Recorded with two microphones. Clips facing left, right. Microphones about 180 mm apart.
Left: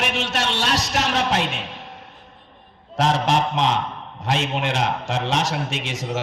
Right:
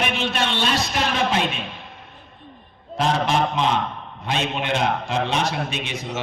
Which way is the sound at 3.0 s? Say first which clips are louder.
Left 1 dB; 80° left.